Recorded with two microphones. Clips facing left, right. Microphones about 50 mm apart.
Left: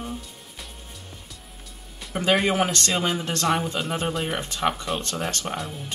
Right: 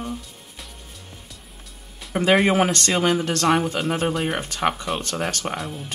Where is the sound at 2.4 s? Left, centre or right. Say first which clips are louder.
Right 4 dB; right.